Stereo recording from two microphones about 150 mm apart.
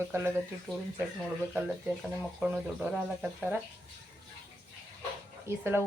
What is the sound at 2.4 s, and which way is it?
Speech, 5° right (ahead or behind).